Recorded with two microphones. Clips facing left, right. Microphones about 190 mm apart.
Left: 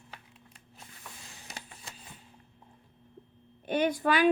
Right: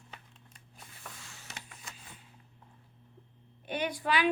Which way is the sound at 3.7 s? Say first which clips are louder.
Left 6 dB; 45° left (ahead or behind).